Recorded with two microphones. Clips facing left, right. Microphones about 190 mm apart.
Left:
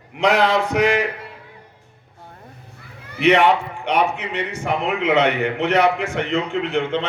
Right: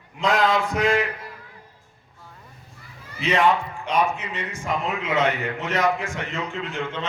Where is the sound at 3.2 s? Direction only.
70° left (ahead or behind).